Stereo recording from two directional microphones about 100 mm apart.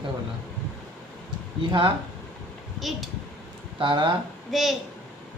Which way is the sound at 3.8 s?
50° right (ahead or behind).